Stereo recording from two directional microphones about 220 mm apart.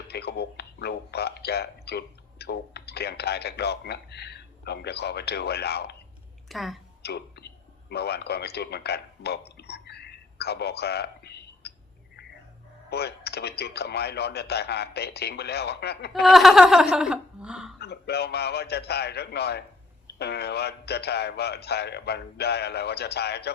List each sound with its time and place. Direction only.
0.1 s speech: 50° left (ahead or behind)
6.5 s speech: centre (ahead or behind)
7.0 s a man's voice: 50° left (ahead or behind)
12.9 s speech: 45° left (ahead or behind)
16.2 s speech: centre (ahead or behind)
17.7 s speech: 45° left (ahead or behind)